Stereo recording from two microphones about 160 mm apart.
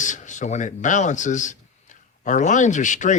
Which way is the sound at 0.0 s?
50° left (ahead or behind).